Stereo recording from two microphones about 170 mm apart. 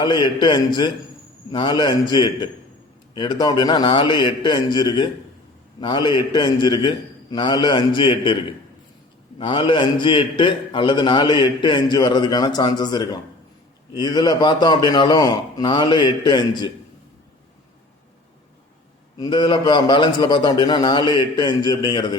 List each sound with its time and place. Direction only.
0.0 s a man's voice: 25° left (ahead or behind)
19.2 s a man's voice: 25° left (ahead or behind)